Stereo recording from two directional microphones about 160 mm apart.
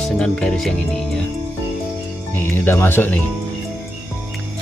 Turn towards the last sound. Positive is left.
turn(degrees=15)  # may be behind; listen again after turning